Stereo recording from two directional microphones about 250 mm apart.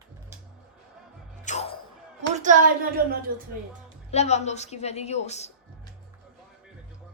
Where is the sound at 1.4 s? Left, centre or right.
Left.